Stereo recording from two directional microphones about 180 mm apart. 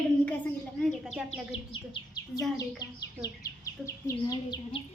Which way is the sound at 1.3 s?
25° left (ahead or behind).